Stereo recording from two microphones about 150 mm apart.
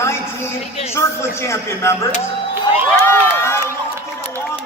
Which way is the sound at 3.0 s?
15° left (ahead or behind).